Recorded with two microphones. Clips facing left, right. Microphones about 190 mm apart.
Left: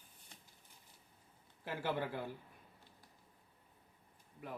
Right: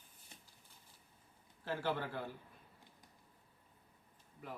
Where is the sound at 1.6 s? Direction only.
15° left (ahead or behind).